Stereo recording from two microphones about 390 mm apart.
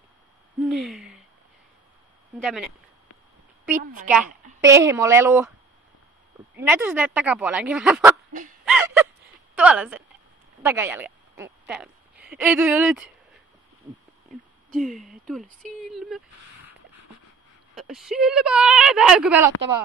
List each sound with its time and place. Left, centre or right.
0.6 s a sound: centre
2.4 s a woman's voice: centre
3.8 s a woman's voice: right
4.6 s speech: centre
6.5 s a woman's voice: centre
8.3 s a sound: centre
8.6 s a sound: centre
10.6 s a woman's voice: centre
14.7 s a woman's voice: centre
17.7 s a woman's voice: centre